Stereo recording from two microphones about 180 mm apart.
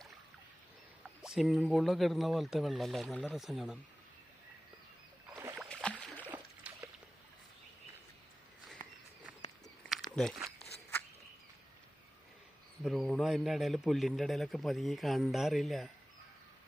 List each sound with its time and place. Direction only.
1.2 s a man's voice: centre (ahead or behind)
5.3 s rowboat: 15° right (ahead or behind)
5.5 s boat: 5° left (ahead or behind)
6.2 s trickle: 10° right (ahead or behind)
10.2 s a man's voice: centre (ahead or behind)
12.8 s a man's voice: centre (ahead or behind)